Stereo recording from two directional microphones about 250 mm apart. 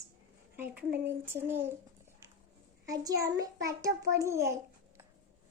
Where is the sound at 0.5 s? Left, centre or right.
Centre.